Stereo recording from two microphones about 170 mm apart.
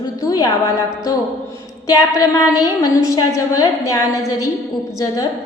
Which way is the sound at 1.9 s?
20° left (ahead or behind).